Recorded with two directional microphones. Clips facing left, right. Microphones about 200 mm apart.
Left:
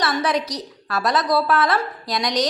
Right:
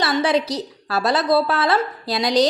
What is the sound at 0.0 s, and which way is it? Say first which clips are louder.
A woman's voice: right 3 dB; 30° right (ahead or behind).